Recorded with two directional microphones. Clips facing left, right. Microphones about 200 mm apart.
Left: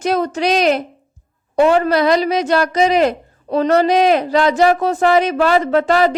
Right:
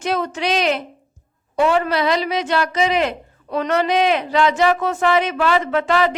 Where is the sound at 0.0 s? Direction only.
40° left (ahead or behind).